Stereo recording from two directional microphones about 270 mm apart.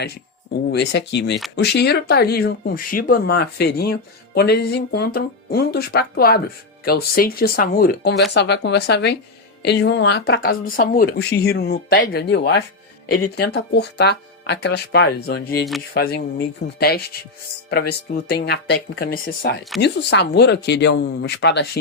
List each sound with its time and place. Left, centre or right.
0.7 s speech: left
16.7 s speech: left